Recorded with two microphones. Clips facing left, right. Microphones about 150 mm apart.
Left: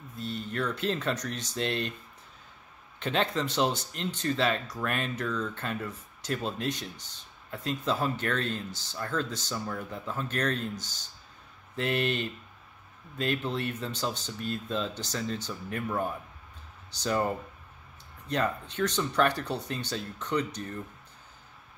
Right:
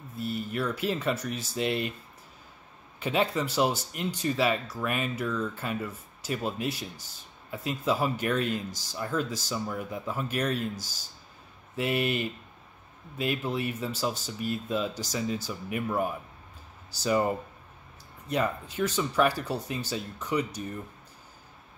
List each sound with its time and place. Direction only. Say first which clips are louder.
0.1 s speech: right 3 dB; 10° right (ahead or behind)
3.0 s speech: right 2 dB; 5° right (ahead or behind)
18.3 s speech: right 1 dB; 5° right (ahead or behind)